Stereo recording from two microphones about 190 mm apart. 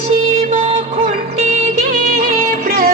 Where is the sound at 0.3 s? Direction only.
30° right (ahead or behind).